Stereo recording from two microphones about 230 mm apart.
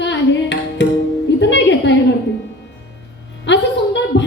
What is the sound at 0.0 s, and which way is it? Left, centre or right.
Music, left.